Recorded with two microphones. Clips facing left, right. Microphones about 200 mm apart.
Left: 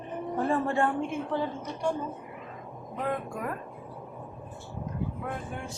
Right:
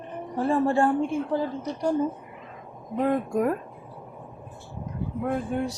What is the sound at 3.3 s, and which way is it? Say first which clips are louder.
Speech: right 11 dB; 40° right (ahead or behind).